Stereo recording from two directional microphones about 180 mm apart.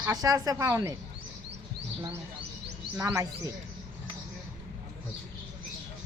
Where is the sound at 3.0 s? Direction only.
15° right (ahead or behind).